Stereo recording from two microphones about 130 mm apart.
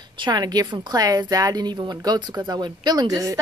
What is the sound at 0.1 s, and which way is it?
A woman's voice, 35° right (ahead or behind).